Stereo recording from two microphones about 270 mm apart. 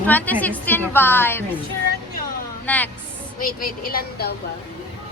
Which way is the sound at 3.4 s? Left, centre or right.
Left.